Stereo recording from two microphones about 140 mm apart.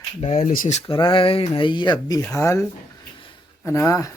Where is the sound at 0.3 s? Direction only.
70° left (ahead or behind).